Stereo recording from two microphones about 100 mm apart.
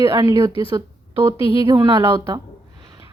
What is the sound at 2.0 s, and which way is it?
Speech, 30° right (ahead or behind).